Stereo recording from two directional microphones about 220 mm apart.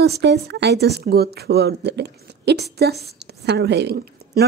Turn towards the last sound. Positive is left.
turn(degrees=-50)  # may be behind; listen again after turning